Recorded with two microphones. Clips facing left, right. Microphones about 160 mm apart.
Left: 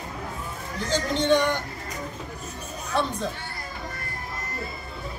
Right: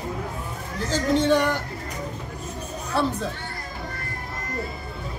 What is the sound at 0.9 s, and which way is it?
Speech, 5° right (ahead or behind).